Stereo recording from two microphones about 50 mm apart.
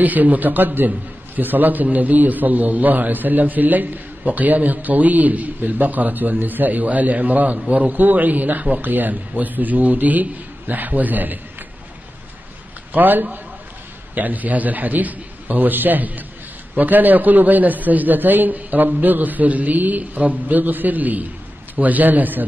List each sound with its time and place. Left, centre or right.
0.0 s a man's voice: right
12.9 s a man's voice: right